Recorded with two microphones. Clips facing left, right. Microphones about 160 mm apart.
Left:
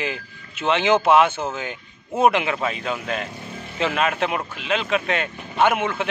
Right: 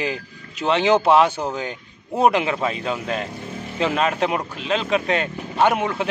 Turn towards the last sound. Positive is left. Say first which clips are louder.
# right 1 dB
turn(degrees=-35)  # may be behind; listen again after turning